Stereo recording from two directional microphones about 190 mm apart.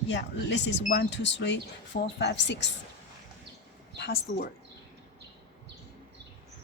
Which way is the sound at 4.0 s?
60° left (ahead or behind).